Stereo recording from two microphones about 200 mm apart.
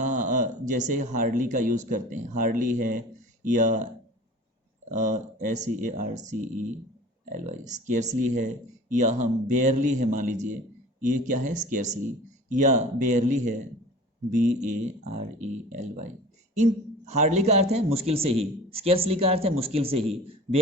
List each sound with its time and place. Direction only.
0.0 s speech: 40° right (ahead or behind)
4.9 s a man's voice: 35° right (ahead or behind)